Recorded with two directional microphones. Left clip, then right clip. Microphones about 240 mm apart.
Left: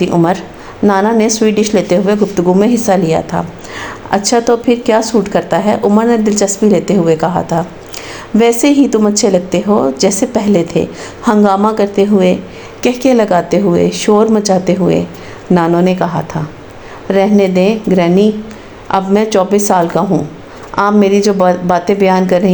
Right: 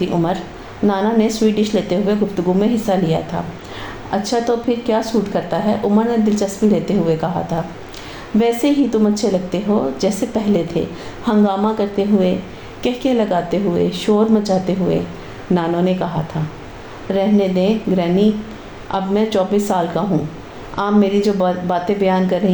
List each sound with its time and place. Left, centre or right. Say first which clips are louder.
0.0 s a woman's voice: left 7 dB; left